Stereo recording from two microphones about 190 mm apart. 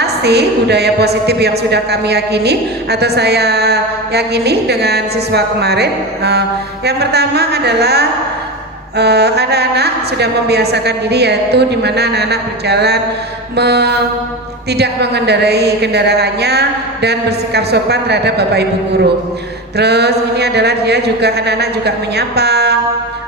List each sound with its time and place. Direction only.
0.0 s a woman's voice: 60° right (ahead or behind)
19.7 s a woman's voice: 60° right (ahead or behind)